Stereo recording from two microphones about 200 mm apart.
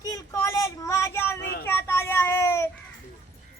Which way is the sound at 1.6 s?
10° left (ahead or behind).